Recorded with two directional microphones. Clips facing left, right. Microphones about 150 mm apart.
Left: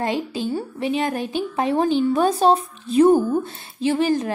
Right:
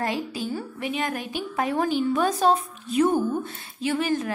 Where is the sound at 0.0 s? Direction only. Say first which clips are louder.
Left 4 dB; 25° left (ahead or behind).